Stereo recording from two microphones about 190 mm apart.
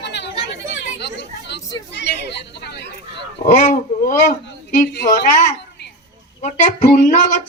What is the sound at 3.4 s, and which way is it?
Speech, 40° left (ahead or behind).